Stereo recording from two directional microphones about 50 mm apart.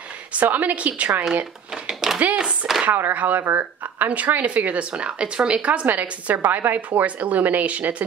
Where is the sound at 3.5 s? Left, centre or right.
Right.